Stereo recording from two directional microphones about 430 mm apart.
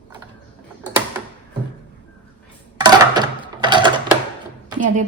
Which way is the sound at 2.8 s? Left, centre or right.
Centre.